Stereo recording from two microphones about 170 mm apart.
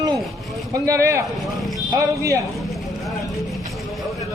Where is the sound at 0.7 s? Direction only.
20° right (ahead or behind).